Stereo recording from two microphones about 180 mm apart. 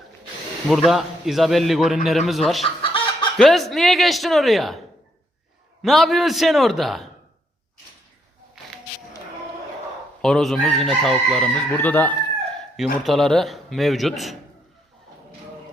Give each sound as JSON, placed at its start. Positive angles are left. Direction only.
{"t": 0.9, "sound": "chicken", "side_deg": 0}
{"t": 2.8, "sound": "chicken", "side_deg": 30}
{"t": 3.3, "sound": "chicken", "side_deg": 0}
{"t": 5.8, "sound": "chicken", "side_deg": 0}
{"t": 10.2, "sound": "chicken", "side_deg": 5}